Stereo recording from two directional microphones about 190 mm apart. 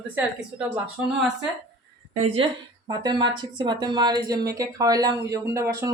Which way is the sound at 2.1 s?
30° right (ahead or behind).